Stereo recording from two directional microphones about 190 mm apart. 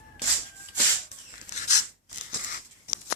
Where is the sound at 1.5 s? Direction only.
40° left (ahead or behind).